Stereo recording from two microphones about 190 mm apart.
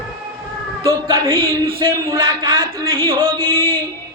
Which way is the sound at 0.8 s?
20° right (ahead or behind).